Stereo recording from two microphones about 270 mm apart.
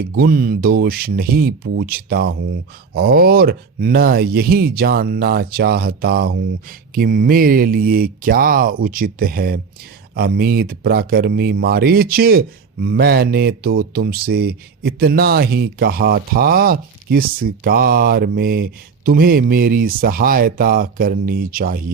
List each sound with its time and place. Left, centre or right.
0.0 s speech: right